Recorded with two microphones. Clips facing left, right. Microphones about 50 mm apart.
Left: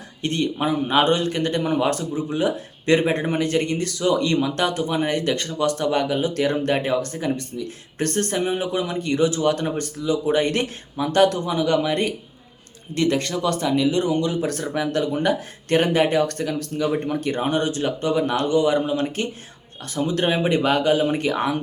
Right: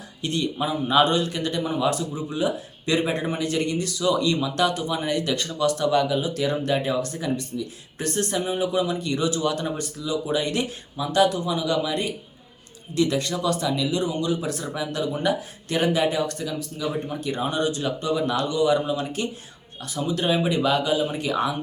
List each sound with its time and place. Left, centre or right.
0.2 s speech: left